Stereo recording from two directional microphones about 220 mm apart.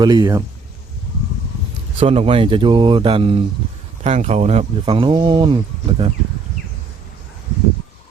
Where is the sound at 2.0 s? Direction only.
25° right (ahead or behind).